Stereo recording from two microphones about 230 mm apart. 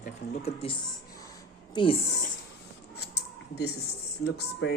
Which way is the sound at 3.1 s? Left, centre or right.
Left.